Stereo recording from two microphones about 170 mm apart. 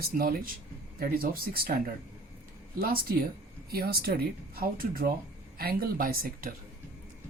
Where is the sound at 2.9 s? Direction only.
60° right (ahead or behind).